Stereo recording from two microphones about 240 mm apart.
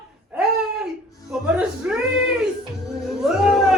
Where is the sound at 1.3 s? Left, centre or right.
Centre.